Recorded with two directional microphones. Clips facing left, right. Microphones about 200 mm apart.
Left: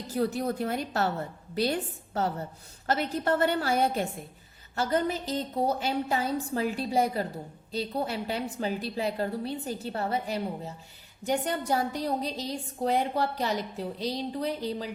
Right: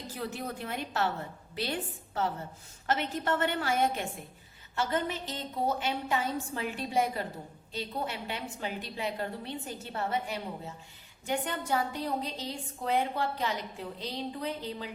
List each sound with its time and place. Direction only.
0.2 s a woman's voice: 40° left (ahead or behind)